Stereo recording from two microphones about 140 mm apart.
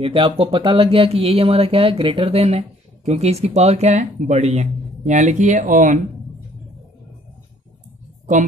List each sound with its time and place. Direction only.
0.0 s speech: 40° right (ahead or behind); by 5.9 s 65° right (ahead or behind)